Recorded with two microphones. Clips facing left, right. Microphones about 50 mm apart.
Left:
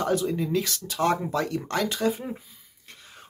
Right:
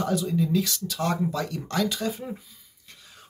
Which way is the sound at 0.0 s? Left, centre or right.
Left.